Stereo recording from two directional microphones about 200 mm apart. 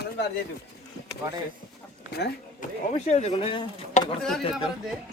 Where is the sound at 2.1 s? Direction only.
55° left (ahead or behind).